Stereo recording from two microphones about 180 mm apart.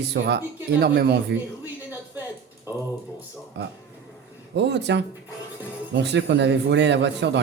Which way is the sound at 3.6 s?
70° right (ahead or behind).